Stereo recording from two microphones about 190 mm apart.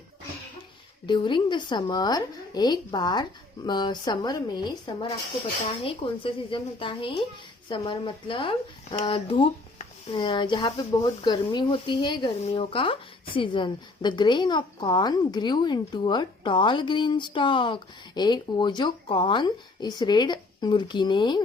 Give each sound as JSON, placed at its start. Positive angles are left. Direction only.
{"t": 1.0, "sound": "a woman's voice", "side_deg": 25}